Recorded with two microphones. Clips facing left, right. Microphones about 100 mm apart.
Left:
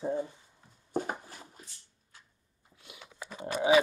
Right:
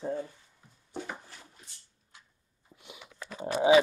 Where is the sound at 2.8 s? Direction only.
20° right (ahead or behind).